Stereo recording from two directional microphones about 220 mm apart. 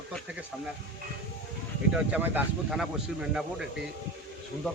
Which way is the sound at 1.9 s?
5° right (ahead or behind).